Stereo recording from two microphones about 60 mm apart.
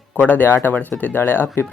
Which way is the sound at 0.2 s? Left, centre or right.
Left.